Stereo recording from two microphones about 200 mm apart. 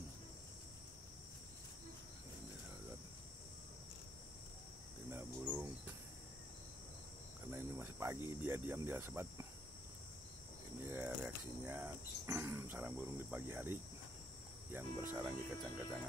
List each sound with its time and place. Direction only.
5.1 s cricket: 10° right (ahead or behind)
7.5 s cricket: 15° right (ahead or behind)
10.9 s speech: 10° right (ahead or behind)